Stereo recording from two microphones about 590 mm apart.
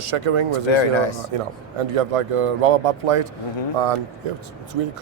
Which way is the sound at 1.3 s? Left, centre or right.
Right.